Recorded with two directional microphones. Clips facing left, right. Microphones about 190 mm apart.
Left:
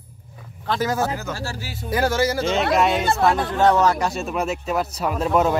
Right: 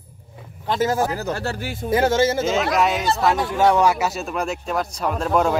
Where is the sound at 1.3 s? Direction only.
60° right (ahead or behind).